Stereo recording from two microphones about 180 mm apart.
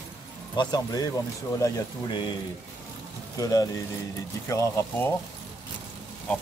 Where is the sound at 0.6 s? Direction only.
20° left (ahead or behind).